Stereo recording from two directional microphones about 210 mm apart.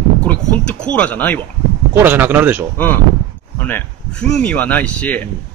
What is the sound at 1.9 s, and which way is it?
Speech, 10° right (ahead or behind).